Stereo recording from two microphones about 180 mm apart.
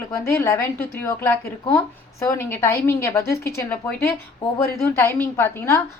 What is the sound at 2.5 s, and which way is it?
Speech, 15° left (ahead or behind).